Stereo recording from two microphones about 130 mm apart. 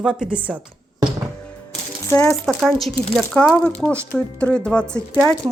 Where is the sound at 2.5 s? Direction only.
Centre (ahead or behind).